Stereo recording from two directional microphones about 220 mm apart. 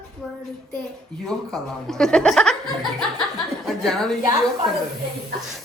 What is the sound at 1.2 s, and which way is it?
Speech, centre (ahead or behind).